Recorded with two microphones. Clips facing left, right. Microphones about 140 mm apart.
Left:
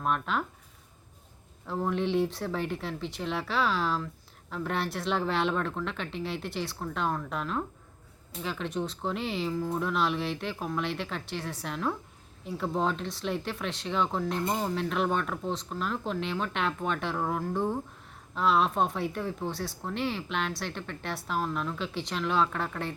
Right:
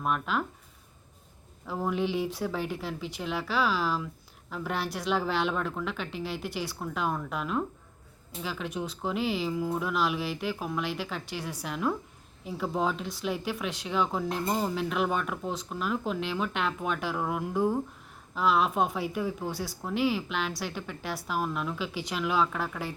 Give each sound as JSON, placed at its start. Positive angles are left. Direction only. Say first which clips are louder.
{"t": 0.0, "sound": "speech", "louder": "even", "side_deg": 0}
{"t": 1.6, "sound": "speech", "louder": "even", "side_deg": -5}